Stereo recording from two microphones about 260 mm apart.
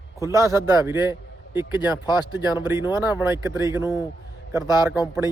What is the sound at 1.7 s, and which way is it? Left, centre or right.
Speech, centre.